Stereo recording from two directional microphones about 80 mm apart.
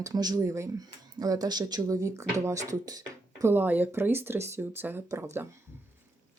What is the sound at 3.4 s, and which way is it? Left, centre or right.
Speech, right.